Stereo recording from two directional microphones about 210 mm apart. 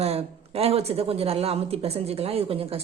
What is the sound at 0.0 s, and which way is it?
A woman's voice, 30° right (ahead or behind).